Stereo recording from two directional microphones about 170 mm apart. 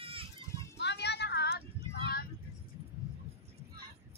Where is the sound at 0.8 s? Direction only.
85° left.